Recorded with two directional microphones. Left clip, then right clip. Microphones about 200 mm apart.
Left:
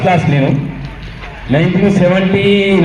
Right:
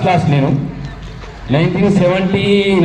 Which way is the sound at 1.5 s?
45° left (ahead or behind).